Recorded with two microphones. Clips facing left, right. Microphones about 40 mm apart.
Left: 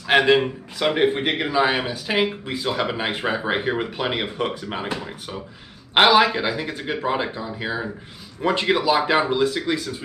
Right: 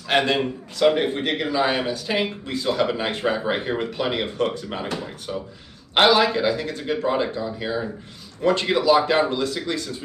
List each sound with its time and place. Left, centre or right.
0.1 s a man's voice: centre
5.9 s a man's voice: centre